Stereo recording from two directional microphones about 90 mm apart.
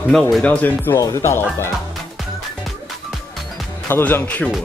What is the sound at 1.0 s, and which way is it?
Speech, 30° left (ahead or behind).